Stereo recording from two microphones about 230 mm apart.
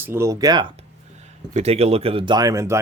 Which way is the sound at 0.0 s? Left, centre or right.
Centre.